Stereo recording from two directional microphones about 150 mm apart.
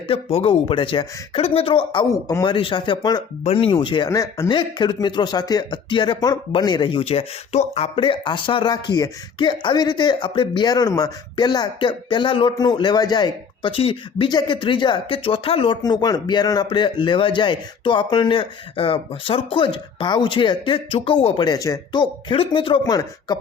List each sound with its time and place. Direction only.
0.1 s speech: 40° left (ahead or behind)